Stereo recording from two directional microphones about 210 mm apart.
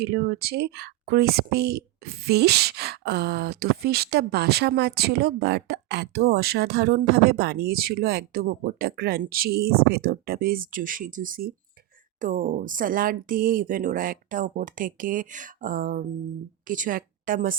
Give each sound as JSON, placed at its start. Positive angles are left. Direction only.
{"t": 0.0, "sound": "a woman's voice", "side_deg": -50}